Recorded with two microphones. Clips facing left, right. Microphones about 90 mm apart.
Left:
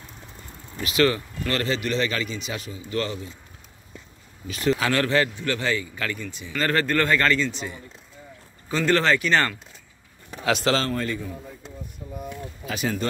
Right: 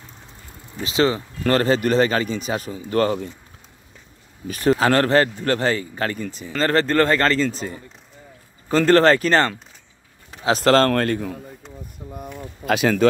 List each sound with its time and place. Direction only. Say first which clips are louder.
0.8 s speech: right 2 dB; 25° right (ahead or behind)
1.4 s a man's voice: right 9 dB; 40° right (ahead or behind)
4.5 s speech: right 5 dB; 40° right (ahead or behind)
10.5 s a man's voice: right 7 dB; 50° right (ahead or behind)
10.9 s a man's voice: right 7 dB; 70° right (ahead or behind)
12.6 s speech: right 9 dB; 90° right